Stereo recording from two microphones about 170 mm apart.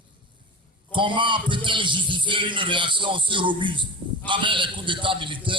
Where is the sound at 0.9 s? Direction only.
30° right (ahead or behind).